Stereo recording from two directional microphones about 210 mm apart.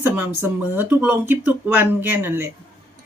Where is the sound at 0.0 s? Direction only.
10° right (ahead or behind).